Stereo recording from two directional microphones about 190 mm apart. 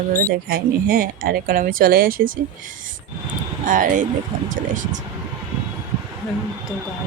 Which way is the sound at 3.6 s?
45° right (ahead or behind).